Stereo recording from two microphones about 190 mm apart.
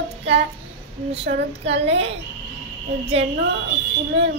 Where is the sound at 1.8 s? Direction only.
35° right (ahead or behind).